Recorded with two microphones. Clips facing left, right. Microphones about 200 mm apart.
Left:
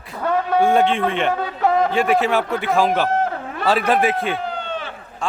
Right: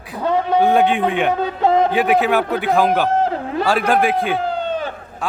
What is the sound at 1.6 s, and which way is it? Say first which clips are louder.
Speech: right 2 dB; 25° right (ahead or behind).